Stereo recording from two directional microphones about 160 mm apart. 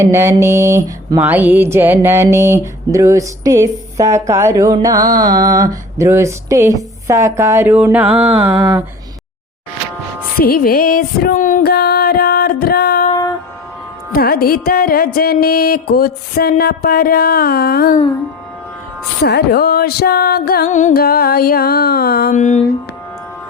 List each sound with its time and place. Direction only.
0.0 s a sound: 15° right (ahead or behind)
10.3 s music: 65° left (ahead or behind)
11.7 s music: 75° left (ahead or behind)
13.1 s music: 25° left (ahead or behind)
14.1 s music: 70° left (ahead or behind)
19.2 s music: 90° left
20.7 s music: 50° left (ahead or behind)
20.9 s music: 70° left (ahead or behind)
22.4 s music: 50° left (ahead or behind)